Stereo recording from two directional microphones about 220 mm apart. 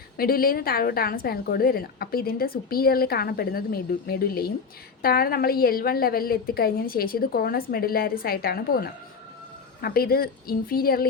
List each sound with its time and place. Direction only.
0.2 s a woman's voice: 40° left (ahead or behind)